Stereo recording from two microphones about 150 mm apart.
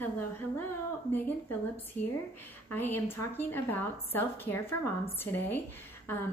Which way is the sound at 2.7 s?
15° left (ahead or behind).